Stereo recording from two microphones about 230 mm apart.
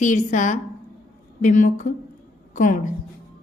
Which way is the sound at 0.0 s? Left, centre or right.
Left.